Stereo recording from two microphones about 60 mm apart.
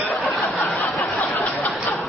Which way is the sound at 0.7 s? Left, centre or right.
Centre.